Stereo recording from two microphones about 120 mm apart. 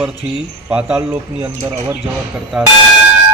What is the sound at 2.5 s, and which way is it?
Speech, centre (ahead or behind).